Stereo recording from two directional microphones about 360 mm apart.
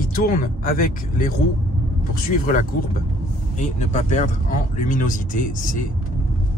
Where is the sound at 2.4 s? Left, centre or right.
Left.